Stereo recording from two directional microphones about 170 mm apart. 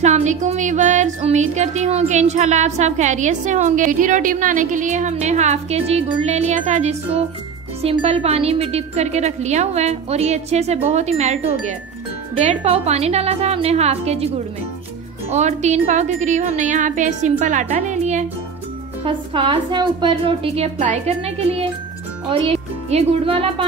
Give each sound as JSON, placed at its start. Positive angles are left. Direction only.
{"t": 0.0, "sound": "music", "side_deg": -45}
{"t": 5.1, "sound": "a woman's voice", "side_deg": -40}
{"t": 15.2, "sound": "music", "side_deg": -40}
{"t": 19.0, "sound": "a woman's voice", "side_deg": -30}